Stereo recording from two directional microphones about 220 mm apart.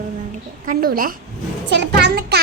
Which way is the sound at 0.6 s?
40° right (ahead or behind).